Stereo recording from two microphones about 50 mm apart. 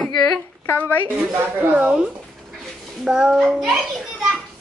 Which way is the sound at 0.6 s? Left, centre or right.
Left.